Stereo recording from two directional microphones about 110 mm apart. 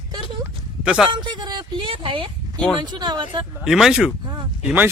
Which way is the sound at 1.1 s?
45° right (ahead or behind).